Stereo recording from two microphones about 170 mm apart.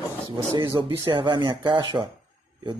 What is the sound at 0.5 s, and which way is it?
Speech, 30° right (ahead or behind).